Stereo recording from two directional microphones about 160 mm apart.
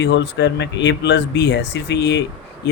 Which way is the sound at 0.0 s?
90° left.